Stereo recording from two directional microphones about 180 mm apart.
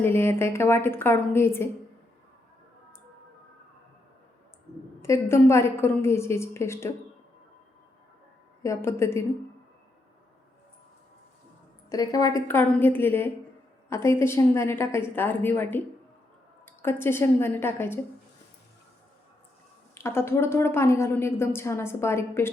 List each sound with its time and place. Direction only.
0.0 s a woman's voice: 15° left (ahead or behind)
5.0 s a woman's voice: 15° left (ahead or behind)
8.6 s a woman's voice: 15° left (ahead or behind)
11.9 s a woman's voice: 20° left (ahead or behind)
19.9 s a woman's voice: 15° left (ahead or behind)